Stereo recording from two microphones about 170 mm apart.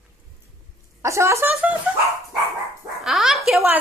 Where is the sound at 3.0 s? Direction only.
Centre (ahead or behind).